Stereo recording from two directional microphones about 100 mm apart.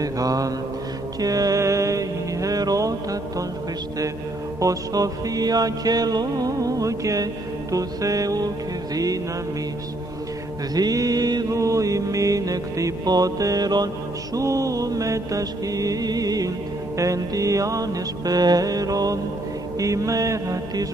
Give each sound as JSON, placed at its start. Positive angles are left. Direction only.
{"t": 0.0, "sound": "mantra", "side_deg": -35}
{"t": 1.2, "sound": "music", "side_deg": -35}
{"t": 4.6, "sound": "mantra", "side_deg": -35}
{"t": 10.7, "sound": "mantra", "side_deg": -40}